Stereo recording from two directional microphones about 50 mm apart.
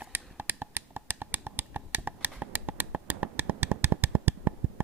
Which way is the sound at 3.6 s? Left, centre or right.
Right.